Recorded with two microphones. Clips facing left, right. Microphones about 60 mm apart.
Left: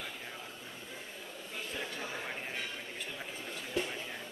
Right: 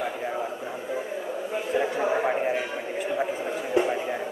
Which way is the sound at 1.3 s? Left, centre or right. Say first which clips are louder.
Right 15 dB; right.